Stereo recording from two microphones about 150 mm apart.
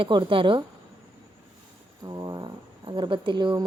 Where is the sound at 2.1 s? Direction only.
25° right (ahead or behind).